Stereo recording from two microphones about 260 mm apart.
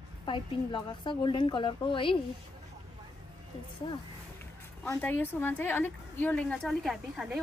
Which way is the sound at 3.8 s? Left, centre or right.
Centre.